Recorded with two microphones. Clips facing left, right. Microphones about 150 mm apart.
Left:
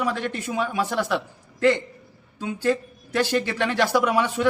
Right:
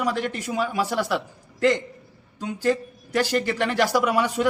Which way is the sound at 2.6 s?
10° right (ahead or behind).